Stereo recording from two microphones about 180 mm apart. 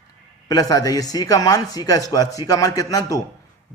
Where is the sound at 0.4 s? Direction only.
20° left (ahead or behind).